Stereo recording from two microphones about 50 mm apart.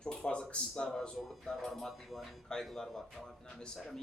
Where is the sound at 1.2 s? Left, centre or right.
Centre.